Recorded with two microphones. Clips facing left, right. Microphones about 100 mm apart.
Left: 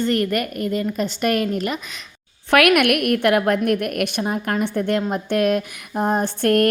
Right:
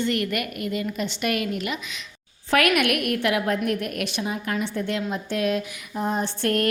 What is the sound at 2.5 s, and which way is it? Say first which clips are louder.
A woman's voice: left 5 dB; 60° left (ahead or behind).